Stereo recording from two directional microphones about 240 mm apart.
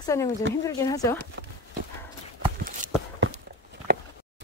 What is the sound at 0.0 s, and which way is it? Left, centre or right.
Speech, centre.